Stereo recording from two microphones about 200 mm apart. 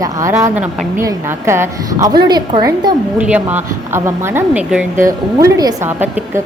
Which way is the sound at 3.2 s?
5° right (ahead or behind).